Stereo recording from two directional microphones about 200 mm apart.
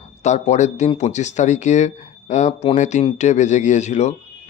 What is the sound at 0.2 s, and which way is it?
Speech, 35° left (ahead or behind).